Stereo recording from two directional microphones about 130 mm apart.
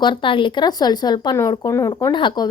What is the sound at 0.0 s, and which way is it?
A woman's voice, 40° left (ahead or behind).